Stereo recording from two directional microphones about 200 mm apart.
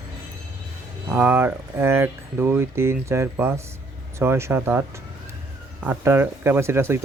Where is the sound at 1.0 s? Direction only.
10° right (ahead or behind).